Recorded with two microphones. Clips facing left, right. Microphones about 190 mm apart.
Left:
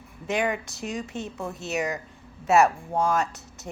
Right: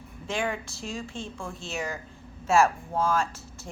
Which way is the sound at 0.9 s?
20° left (ahead or behind).